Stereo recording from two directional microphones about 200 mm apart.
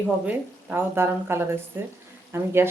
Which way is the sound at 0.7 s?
10° right (ahead or behind).